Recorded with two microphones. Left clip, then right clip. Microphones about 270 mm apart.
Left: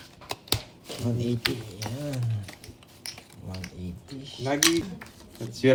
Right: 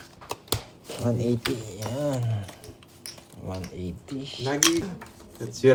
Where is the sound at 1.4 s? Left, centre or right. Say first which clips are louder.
Even; centre.